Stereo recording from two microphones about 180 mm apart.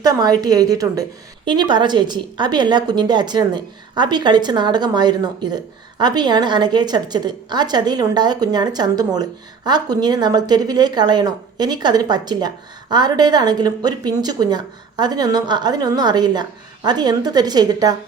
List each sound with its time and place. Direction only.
0.0 s a woman's voice: 20° right (ahead or behind)